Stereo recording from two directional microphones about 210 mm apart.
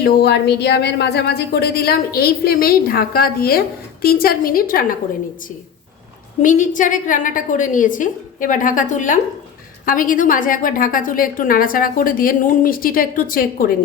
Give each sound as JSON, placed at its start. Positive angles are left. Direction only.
{"t": 0.0, "sound": "speech", "side_deg": 50}
{"t": 6.4, "sound": "a woman's voice", "side_deg": 35}